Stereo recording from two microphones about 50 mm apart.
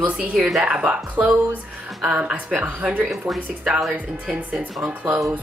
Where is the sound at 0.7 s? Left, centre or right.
Right.